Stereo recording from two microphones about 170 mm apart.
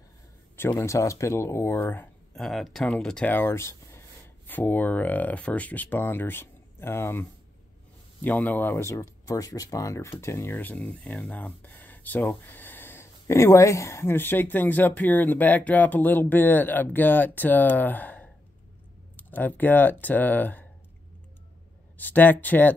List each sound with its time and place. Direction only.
0.6 s speech: 15° left (ahead or behind)
21.9 s speech: 10° left (ahead or behind)